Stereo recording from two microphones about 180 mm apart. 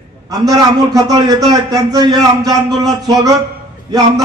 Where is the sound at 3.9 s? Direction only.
20° right (ahead or behind).